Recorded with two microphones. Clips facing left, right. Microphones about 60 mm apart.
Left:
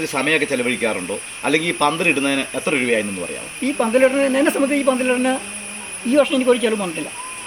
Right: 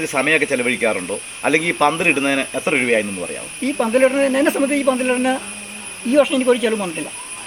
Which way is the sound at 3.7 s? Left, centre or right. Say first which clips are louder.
Even; centre.